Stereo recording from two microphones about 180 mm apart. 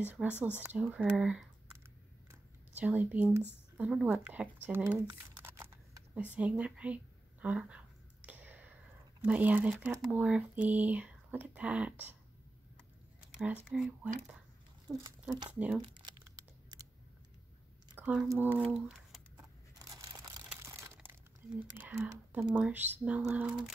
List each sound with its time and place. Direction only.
0.1 s speech: 10° right (ahead or behind)
2.8 s speech: 10° right (ahead or behind)
8.3 s a sound: 10° right (ahead or behind)
9.2 s speech: 10° right (ahead or behind)
13.4 s speech: 10° right (ahead or behind)
14.9 s speech: 20° right (ahead or behind)
15.8 s crumpling: 25° right (ahead or behind)
17.9 s speech: 10° right (ahead or behind)
20.0 s crumpling: 25° right (ahead or behind)
21.7 s speech: 10° right (ahead or behind)